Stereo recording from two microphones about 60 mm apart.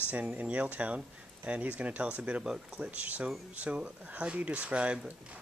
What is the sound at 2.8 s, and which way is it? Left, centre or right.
Speech, right.